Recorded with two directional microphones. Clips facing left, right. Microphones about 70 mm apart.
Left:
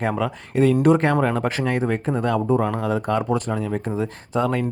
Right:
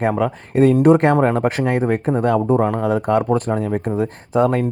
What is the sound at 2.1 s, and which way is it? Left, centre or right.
Speech, right.